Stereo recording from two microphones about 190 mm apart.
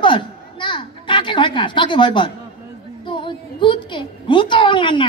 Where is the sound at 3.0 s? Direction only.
25° left (ahead or behind).